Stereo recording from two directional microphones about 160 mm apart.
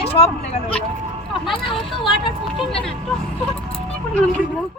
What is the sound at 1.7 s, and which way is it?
Speech, centre (ahead or behind).